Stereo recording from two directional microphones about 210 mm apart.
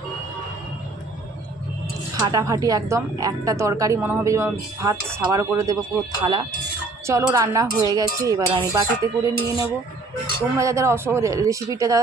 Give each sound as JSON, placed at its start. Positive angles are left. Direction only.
{"t": 2.1, "sound": "speech", "side_deg": -15}
{"t": 7.1, "sound": "speech", "side_deg": -15}